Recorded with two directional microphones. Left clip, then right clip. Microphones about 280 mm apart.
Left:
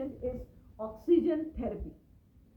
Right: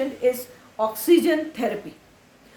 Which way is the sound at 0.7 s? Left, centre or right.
Right.